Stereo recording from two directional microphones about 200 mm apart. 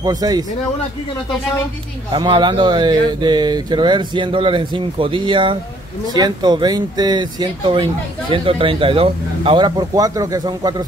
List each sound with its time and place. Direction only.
0.0 s speech: 20° right (ahead or behind)
2.1 s speech: 25° right (ahead or behind)